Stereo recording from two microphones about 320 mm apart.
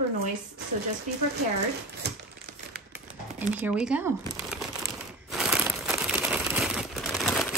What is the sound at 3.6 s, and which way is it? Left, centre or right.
Speech, centre.